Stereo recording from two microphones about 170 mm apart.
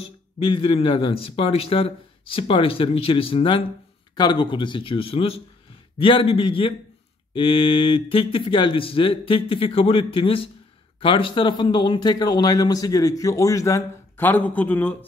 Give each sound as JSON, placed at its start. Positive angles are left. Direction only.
{"t": 0.5, "sound": "a man's voice", "side_deg": 30}